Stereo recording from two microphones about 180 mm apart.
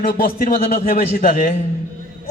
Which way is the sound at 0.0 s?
55° left (ahead or behind).